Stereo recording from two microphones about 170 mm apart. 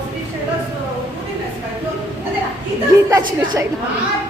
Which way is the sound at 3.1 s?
25° right (ahead or behind).